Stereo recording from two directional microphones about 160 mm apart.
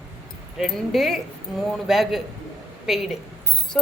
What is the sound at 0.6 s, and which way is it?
Speech, centre (ahead or behind).